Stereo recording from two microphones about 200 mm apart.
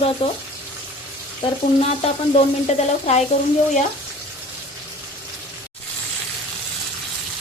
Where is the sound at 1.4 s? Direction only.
30° left (ahead or behind).